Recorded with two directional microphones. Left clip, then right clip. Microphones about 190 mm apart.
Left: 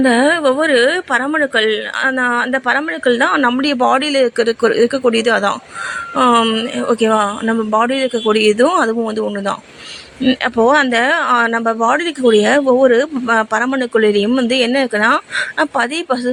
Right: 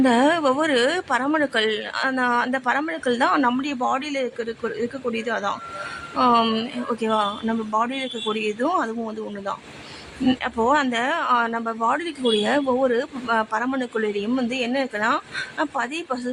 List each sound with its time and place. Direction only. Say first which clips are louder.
0.0 s speech: left 6 dB; 10° left (ahead or behind)
3.6 s speech: left 10 dB; 25° left (ahead or behind)
6.1 s speech: left 6 dB; 15° left (ahead or behind)
6.7 s speech: left 11 dB; 20° left (ahead or behind)
10.4 s speech: left 9 dB; 20° left (ahead or behind)